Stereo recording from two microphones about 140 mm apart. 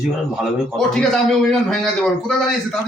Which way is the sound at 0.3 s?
Centre (ahead or behind).